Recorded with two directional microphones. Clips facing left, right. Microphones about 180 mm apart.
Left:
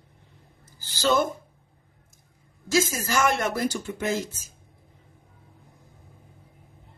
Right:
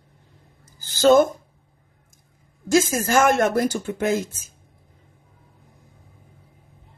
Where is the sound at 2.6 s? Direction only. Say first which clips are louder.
Right 5 dB; 50° right (ahead or behind).